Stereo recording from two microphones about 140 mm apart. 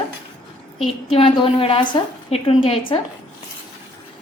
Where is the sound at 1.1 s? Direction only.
40° left (ahead or behind).